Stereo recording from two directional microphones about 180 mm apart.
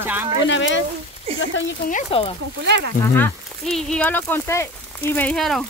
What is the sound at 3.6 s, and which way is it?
Speech, 5° left (ahead or behind).